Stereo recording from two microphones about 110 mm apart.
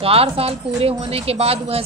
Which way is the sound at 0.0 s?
60° right (ahead or behind).